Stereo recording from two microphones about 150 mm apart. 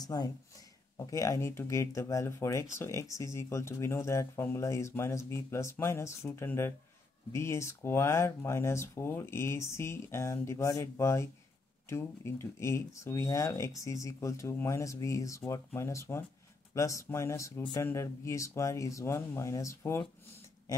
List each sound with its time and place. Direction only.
0.0 s speech: 25° left (ahead or behind)